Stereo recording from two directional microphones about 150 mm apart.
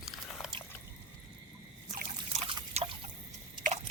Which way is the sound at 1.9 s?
50° right (ahead or behind).